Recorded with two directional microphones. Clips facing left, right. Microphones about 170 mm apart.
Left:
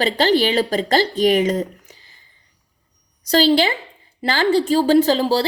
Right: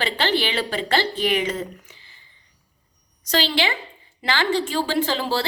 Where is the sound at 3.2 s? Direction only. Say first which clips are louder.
Left 7 dB; 35° left (ahead or behind).